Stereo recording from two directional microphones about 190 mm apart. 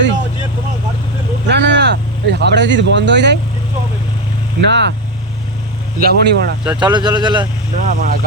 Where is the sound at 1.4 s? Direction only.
65° right (ahead or behind).